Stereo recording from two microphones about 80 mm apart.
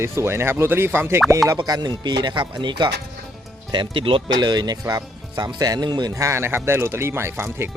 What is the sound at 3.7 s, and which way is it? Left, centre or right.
Speech, right.